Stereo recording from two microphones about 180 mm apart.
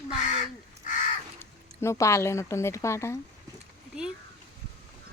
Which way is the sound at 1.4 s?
15° left (ahead or behind).